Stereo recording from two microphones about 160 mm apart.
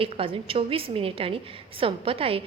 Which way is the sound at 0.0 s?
35° right (ahead or behind).